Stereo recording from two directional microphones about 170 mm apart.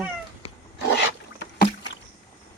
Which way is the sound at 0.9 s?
85° left.